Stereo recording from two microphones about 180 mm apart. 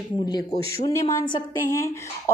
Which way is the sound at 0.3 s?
20° left (ahead or behind).